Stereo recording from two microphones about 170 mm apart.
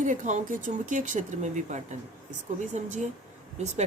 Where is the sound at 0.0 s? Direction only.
45° right (ahead or behind).